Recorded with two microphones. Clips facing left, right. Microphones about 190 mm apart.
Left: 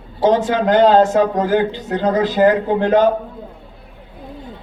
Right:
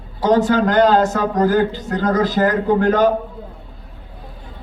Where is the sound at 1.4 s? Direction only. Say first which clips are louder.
Right 1 dB; 40° right (ahead or behind).